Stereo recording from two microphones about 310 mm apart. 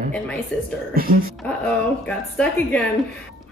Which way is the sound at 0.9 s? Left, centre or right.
Right.